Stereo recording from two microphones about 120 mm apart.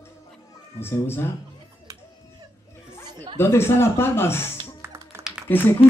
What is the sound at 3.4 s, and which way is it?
Speech, 20° left (ahead or behind).